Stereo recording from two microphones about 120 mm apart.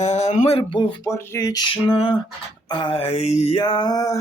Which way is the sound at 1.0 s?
25° left (ahead or behind).